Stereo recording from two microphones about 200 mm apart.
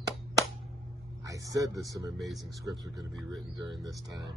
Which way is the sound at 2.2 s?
Centre (ahead or behind).